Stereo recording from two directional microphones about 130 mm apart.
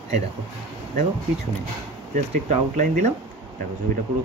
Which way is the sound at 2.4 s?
70° right (ahead or behind).